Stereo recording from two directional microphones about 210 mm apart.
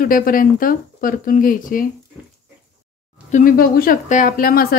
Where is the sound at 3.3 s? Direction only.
40° left (ahead or behind).